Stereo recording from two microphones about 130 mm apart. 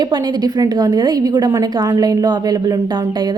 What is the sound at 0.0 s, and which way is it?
A woman's voice, 35° right (ahead or behind).